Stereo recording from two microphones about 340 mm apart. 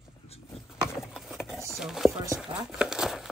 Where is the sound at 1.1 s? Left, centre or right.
Centre.